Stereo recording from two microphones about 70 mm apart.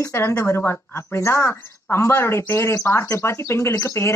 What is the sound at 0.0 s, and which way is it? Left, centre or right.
Speech, left.